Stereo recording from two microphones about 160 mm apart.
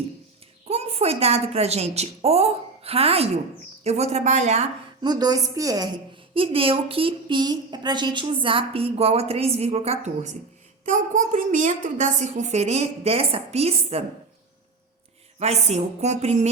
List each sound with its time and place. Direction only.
0.7 s a woman's voice: 40° right (ahead or behind)
5.0 s a woman's voice: 25° right (ahead or behind)
6.3 s a woman's voice: 35° right (ahead or behind)
15.4 s a woman's voice: 40° right (ahead or behind)